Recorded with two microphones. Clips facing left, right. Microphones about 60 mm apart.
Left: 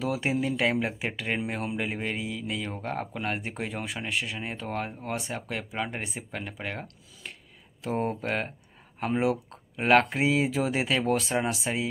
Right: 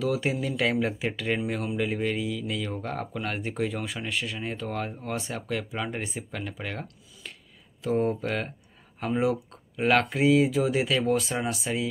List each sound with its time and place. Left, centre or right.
0.0 s speech: left